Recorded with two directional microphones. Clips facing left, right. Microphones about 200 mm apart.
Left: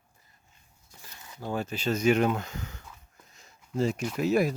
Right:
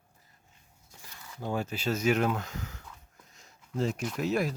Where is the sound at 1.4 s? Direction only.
10° right (ahead or behind).